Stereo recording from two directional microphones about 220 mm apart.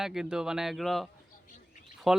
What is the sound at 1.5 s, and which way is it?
Bird, 35° left (ahead or behind).